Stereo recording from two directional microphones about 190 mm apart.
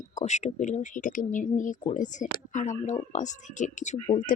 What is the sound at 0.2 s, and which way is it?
Speech, 40° left (ahead or behind).